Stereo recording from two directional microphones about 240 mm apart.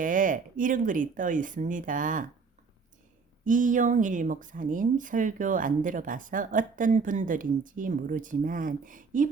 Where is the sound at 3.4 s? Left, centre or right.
Right.